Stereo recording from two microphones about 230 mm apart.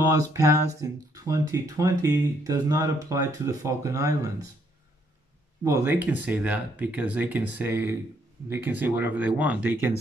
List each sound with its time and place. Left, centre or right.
0.1 s speech: centre
5.6 s speech: centre